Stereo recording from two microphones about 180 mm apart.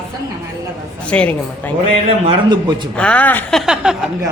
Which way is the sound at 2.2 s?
25° right (ahead or behind).